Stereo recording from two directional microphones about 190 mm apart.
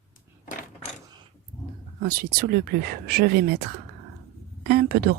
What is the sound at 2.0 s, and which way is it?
Speech, 50° right (ahead or behind).